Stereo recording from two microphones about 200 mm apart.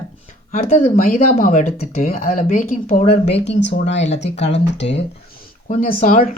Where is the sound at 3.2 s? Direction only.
60° left (ahead or behind).